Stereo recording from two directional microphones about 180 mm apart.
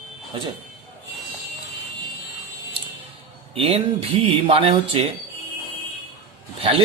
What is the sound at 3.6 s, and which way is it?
A man's voice, 30° right (ahead or behind).